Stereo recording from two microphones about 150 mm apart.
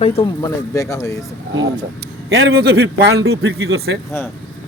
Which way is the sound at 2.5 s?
90° right.